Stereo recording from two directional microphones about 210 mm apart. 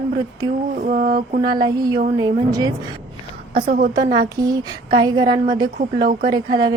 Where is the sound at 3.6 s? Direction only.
45° right (ahead or behind).